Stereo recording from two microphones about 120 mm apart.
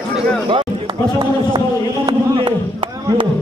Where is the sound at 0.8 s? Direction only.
35° right (ahead or behind).